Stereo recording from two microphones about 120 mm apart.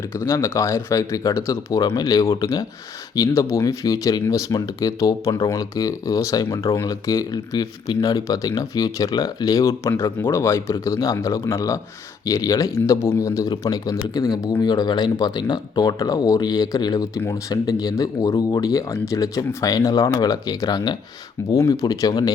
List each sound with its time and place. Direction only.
0.1 s speech: 25° left (ahead or behind)